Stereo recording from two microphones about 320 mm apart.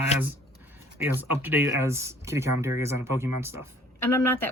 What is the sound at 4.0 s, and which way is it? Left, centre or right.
Speech, centre.